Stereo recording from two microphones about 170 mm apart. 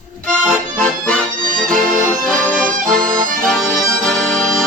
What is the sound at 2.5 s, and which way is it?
Music, 5° left (ahead or behind).